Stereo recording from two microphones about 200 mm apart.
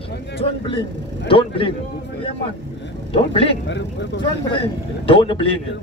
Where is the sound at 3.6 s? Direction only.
65° left (ahead or behind).